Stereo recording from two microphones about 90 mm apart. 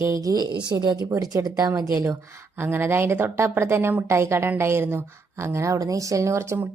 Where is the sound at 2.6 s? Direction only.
25° right (ahead or behind).